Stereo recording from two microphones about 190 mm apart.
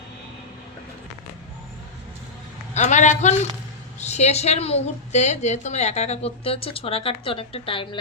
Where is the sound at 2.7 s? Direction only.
40° left (ahead or behind).